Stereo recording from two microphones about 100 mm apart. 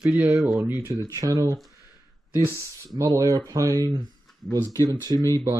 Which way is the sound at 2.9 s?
40° right (ahead or behind).